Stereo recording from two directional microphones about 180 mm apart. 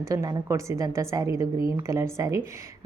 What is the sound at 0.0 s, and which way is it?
A woman's voice, 20° right (ahead or behind).